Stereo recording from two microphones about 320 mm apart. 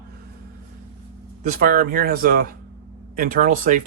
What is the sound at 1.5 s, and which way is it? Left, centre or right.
Speech, right.